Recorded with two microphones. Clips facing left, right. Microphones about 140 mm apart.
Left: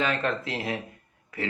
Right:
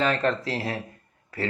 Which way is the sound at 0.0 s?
40° right (ahead or behind).